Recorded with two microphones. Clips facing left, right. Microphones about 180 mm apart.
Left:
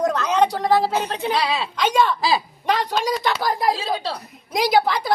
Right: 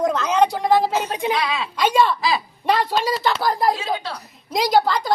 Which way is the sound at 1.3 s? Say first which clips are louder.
Left 1 dB; 30° left (ahead or behind).